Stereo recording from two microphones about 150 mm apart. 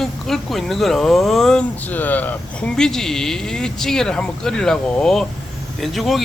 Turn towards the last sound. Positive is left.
turn(degrees=0)  # may be behind; listen again after turning